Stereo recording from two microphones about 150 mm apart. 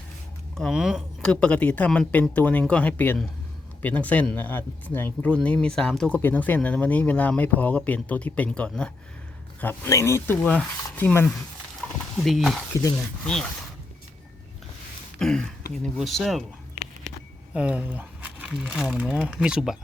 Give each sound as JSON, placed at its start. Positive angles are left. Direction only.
{"t": 0.5, "sound": "speech", "side_deg": -5}
{"t": 12.1, "sound": "speech", "side_deg": 0}
{"t": 12.7, "sound": "speech", "side_deg": 20}
{"t": 15.2, "sound": "speech", "side_deg": 5}
{"t": 17.5, "sound": "speech", "side_deg": -10}